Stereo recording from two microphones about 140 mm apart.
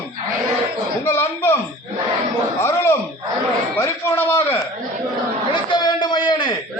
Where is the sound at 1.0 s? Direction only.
15° left (ahead or behind).